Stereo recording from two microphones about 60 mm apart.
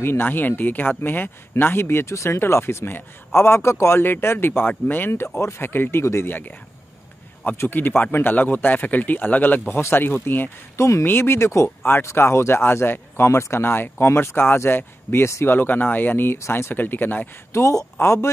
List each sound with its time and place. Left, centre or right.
0.0 s speech: left
6.2 s speech: left
7.5 s speech: left
9.8 s speech: left
10.8 s speech: left
11.1 s speech: left
16.4 s speech: left
16.7 s speech: left
17.5 s speech: left